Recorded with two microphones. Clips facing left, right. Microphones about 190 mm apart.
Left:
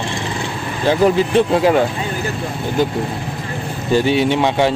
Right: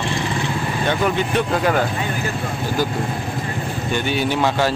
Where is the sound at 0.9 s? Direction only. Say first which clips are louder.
Left 8 dB; 30° left (ahead or behind).